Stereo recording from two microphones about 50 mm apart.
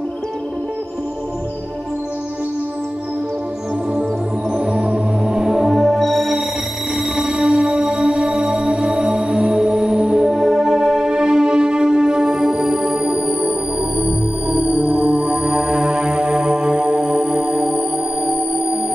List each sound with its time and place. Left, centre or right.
4.6 s music: right; by 6.3 s centre
7.2 s music: centre
10.3 s music: centre